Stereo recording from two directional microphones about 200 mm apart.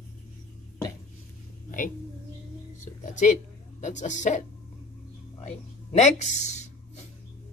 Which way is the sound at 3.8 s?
35° left (ahead or behind).